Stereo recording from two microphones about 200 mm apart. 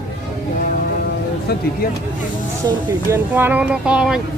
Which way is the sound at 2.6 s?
15° right (ahead or behind).